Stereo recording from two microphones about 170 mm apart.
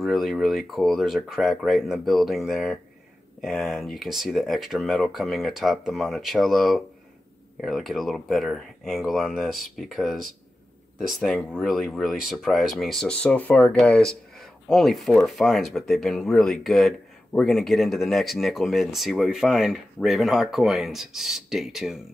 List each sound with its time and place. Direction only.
0.0 s speech: centre (ahead or behind)